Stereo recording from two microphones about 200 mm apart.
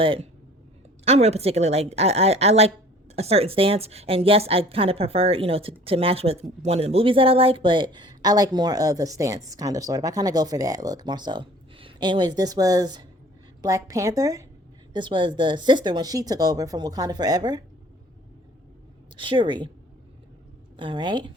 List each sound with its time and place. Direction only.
0.0 s a woman's voice: 25° right (ahead or behind)
19.1 s speech: 25° right (ahead or behind)
20.7 s speech: 25° right (ahead or behind)